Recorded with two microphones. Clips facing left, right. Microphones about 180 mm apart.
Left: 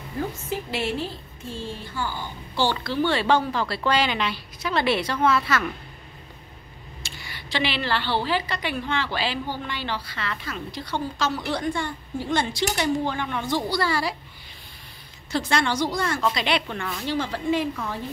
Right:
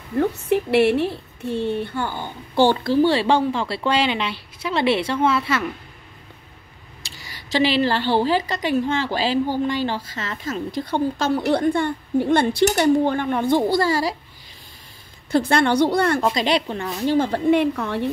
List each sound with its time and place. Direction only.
0.2 s a woman's voice: 65° right (ahead or behind); by 5.7 s 25° right (ahead or behind)
7.0 s a woman's voice: 35° right (ahead or behind)
15.3 s speech: 55° right (ahead or behind)
16.2 s a woman's voice: 40° right (ahead or behind); by 18.0 s 70° right (ahead or behind)